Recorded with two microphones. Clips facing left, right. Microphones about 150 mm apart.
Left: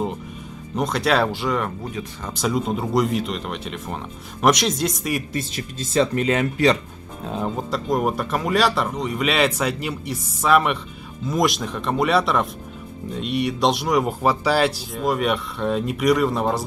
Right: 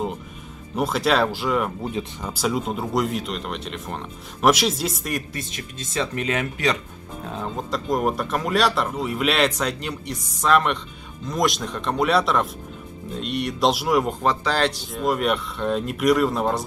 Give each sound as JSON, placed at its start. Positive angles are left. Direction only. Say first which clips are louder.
{"t": 0.7, "sound": "speech", "louder": "even", "side_deg": -5}
{"t": 1.8, "sound": "speech", "louder": "right 3 dB", "side_deg": -25}
{"t": 2.2, "sound": "speech", "louder": "left 2 dB", "side_deg": -5}
{"t": 5.3, "sound": "speech", "louder": "left 5 dB", "side_deg": 35}
{"t": 7.7, "sound": "speech", "louder": "even", "side_deg": 0}